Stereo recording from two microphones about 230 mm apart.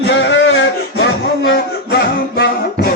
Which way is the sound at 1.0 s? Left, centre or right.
Left.